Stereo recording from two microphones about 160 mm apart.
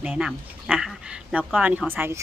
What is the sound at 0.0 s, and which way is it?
Speech, 5° right (ahead or behind).